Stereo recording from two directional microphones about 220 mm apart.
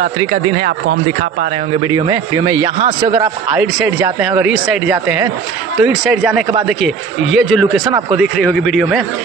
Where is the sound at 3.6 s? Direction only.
5° right (ahead or behind).